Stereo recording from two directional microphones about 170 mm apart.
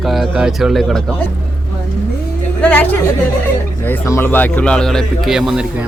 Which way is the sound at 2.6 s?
5° left (ahead or behind).